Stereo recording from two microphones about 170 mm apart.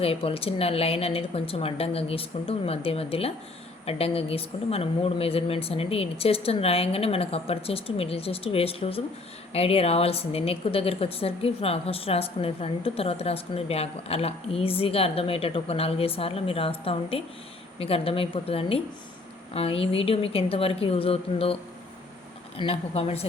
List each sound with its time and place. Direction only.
0.0 s a woman's voice: 35° left (ahead or behind)